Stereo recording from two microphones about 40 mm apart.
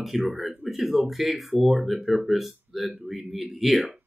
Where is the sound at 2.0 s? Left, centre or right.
Centre.